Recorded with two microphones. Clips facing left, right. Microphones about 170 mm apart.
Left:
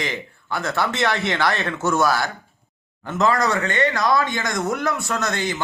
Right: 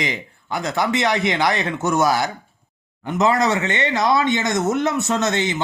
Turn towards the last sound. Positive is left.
turn(degrees=-20)  # may be behind; listen again after turning